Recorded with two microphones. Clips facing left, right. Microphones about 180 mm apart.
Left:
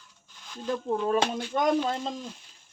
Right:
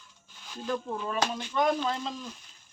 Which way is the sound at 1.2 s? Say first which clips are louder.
Left 1 dB; 50° left (ahead or behind).